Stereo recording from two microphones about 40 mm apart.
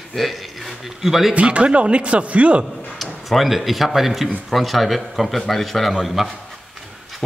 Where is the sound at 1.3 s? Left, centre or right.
Right.